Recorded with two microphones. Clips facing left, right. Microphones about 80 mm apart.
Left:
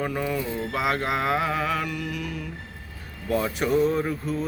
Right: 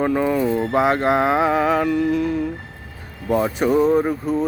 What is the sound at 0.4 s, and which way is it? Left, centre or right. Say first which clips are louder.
Speech: right 10 dB; right.